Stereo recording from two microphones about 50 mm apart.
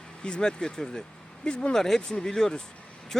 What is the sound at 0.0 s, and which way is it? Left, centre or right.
Speech, centre.